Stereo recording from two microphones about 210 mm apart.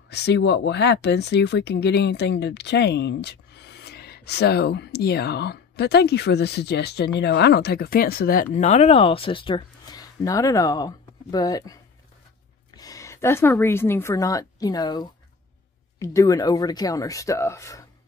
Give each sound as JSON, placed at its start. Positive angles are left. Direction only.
{"t": 0.1, "sound": "speech", "side_deg": 55}
{"t": 8.5, "sound": "speech", "side_deg": 30}
{"t": 12.7, "sound": "a woman's voice", "side_deg": 15}